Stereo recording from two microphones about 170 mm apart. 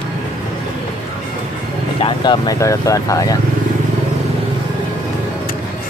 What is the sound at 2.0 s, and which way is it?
Speech, 25° left (ahead or behind).